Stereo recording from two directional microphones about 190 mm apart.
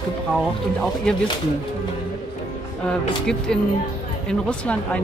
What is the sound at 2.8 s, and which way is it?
A woman's voice, 5° left (ahead or behind).